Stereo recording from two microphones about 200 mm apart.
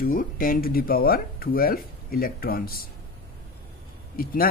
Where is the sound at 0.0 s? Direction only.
45° left (ahead or behind).